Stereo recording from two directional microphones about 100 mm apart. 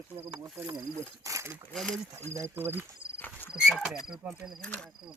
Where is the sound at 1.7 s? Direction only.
5° left (ahead or behind).